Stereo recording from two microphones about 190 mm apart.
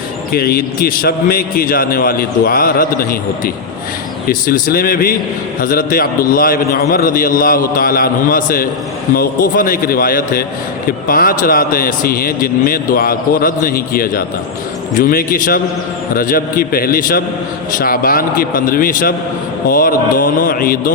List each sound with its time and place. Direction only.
0.3 s a man's voice: 50° left (ahead or behind)